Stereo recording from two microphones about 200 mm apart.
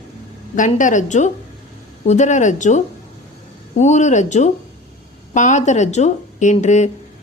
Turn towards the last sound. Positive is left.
turn(degrees=35)  # may be behind; listen again after turning